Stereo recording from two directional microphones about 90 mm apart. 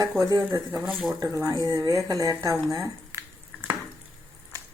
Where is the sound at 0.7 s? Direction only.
Centre (ahead or behind).